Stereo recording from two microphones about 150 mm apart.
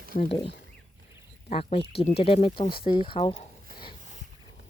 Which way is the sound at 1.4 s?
45° left (ahead or behind).